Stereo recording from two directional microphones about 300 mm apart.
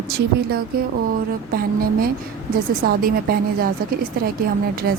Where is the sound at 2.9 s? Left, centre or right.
Right.